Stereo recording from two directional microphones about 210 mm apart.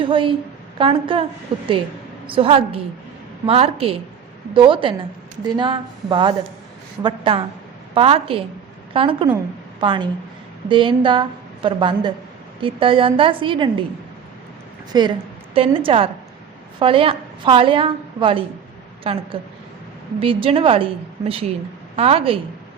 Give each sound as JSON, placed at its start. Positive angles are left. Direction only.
{"t": 0.0, "sound": "a woman's voice", "side_deg": -25}
{"t": 14.9, "sound": "a woman's voice", "side_deg": -20}